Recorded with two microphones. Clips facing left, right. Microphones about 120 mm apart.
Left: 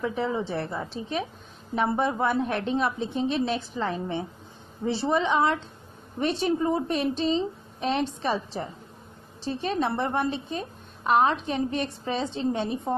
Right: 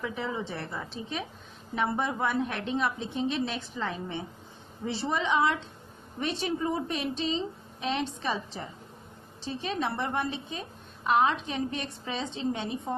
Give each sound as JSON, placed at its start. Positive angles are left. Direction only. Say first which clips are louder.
{"t": 0.0, "sound": "a woman's voice", "louder": "left 6 dB", "side_deg": 35}